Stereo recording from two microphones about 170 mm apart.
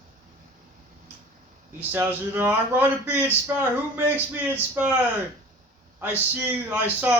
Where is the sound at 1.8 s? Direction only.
10° right (ahead or behind).